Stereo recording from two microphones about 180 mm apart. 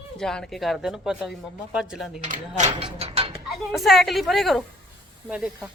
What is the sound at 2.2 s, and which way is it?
Speech, 45° right (ahead or behind).